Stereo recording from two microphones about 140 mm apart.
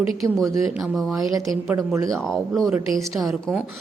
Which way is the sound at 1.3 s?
25° right (ahead or behind).